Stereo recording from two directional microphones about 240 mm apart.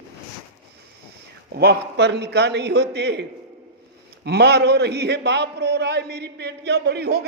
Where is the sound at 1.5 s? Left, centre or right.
Right.